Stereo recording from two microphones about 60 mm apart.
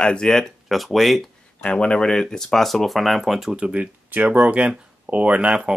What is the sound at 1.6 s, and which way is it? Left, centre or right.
Speech, centre.